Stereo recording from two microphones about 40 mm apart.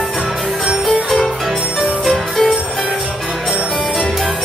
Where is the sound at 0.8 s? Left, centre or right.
Centre.